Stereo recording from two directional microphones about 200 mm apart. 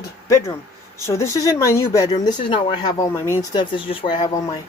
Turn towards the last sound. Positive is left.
turn(degrees=20)  # may be behind; listen again after turning